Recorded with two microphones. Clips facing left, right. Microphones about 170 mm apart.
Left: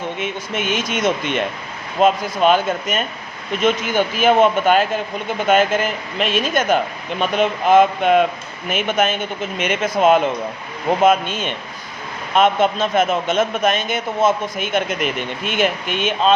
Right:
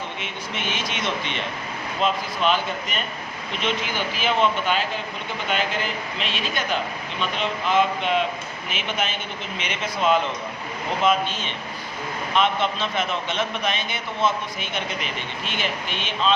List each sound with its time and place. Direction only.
0.2 s a man's voice: 50° left (ahead or behind)